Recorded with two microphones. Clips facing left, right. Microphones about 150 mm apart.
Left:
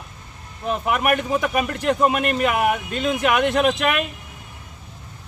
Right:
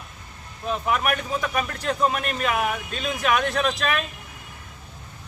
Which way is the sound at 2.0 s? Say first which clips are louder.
Left 3 dB; 65° left (ahead or behind).